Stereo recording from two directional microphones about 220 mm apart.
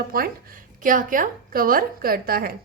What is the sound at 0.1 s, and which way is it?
A woman's voice, 40° right (ahead or behind).